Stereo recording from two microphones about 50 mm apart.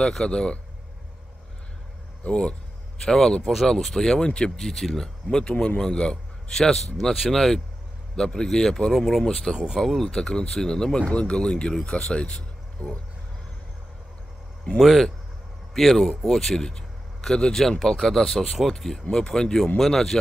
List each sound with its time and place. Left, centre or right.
0.1 s speech: centre
2.2 s speech: centre
14.8 s speech: centre